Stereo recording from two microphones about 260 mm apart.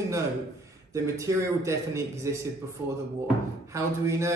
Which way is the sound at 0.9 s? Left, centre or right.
Centre.